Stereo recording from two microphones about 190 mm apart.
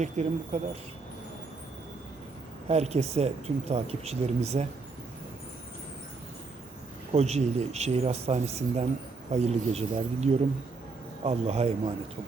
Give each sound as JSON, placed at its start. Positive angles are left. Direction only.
{"t": 0.0, "sound": "speech", "side_deg": -35}
{"t": 2.6, "sound": "speech", "side_deg": -35}
{"t": 7.1, "sound": "speech", "side_deg": -35}